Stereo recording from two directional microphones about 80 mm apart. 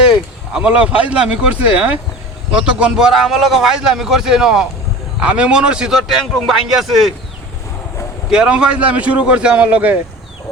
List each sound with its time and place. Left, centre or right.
0.1 s a man's voice: centre
6.1 s a man's voice: centre
8.3 s speech: centre